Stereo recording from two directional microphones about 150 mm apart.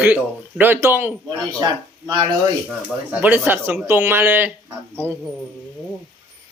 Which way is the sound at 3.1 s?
10° right (ahead or behind).